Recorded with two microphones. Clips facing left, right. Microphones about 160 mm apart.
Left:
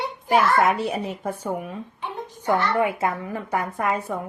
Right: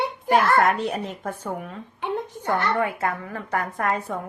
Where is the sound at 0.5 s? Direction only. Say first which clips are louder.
Even; 5° left (ahead or behind).